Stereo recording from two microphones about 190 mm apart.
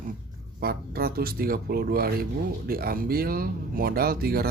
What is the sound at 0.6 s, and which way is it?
Speech, 55° right (ahead or behind).